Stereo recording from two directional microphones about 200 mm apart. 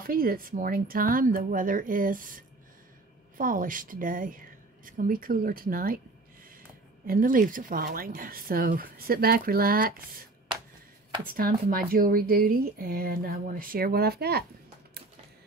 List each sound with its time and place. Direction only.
0.0 s speech: 45° right (ahead or behind)
7.1 s speech: 45° right (ahead or behind)
11.2 s speech: 50° right (ahead or behind)